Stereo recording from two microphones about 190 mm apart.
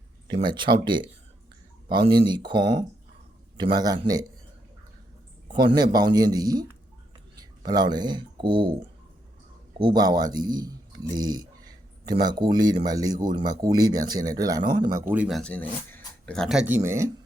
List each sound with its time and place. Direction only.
0.3 s speech: 25° right (ahead or behind)
5.5 s speech: 25° right (ahead or behind)